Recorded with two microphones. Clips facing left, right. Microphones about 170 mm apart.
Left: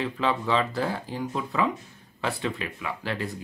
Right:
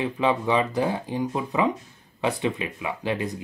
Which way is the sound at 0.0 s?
15° right (ahead or behind).